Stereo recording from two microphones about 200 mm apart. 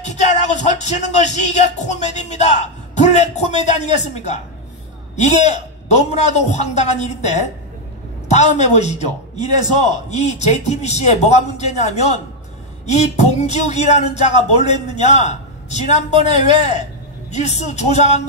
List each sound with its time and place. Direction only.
0.1 s speech: 35° left (ahead or behind)
9.4 s a man's voice: 20° right (ahead or behind)
10.0 s speech: 35° left (ahead or behind)